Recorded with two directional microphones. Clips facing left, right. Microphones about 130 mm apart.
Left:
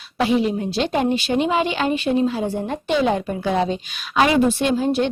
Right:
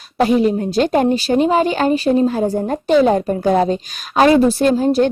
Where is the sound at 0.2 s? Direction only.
45° right (ahead or behind).